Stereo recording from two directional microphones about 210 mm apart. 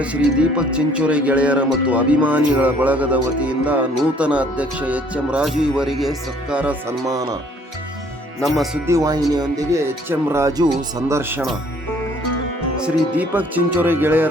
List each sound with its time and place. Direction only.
0.0 s speech: 5° right (ahead or behind)
8.4 s speech: centre (ahead or behind)
8.9 s speech: 15° right (ahead or behind)
12.8 s speech: 10° right (ahead or behind)